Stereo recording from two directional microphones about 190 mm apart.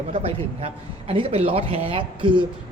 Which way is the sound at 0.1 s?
30° right (ahead or behind).